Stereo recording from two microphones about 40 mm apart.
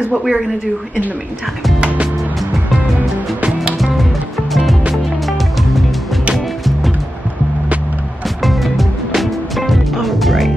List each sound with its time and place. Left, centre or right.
0.1 s a woman's voice: centre
6.3 s music: centre
8.4 s music: centre